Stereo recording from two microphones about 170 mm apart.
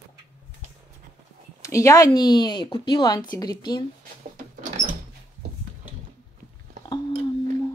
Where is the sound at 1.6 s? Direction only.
20° left (ahead or behind).